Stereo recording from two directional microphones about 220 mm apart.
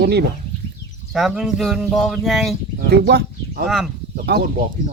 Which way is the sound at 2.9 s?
45° right (ahead or behind).